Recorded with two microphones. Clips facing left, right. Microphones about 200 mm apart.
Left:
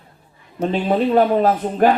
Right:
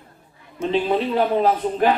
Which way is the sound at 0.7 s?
45° left (ahead or behind).